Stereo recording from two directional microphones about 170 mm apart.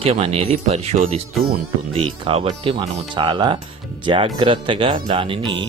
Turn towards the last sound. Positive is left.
turn(degrees=-30)  # may be behind; listen again after turning